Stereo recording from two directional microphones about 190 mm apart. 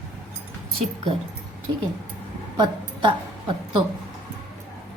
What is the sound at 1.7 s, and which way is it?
A woman's voice, 25° right (ahead or behind).